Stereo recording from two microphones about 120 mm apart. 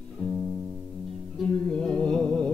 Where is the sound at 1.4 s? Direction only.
5° left (ahead or behind).